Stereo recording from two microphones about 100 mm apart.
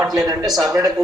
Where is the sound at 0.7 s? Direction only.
40° right (ahead or behind).